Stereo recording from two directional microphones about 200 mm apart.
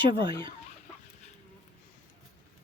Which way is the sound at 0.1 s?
25° right (ahead or behind).